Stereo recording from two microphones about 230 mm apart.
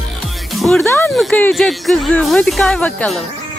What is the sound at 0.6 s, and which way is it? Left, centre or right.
Music, centre.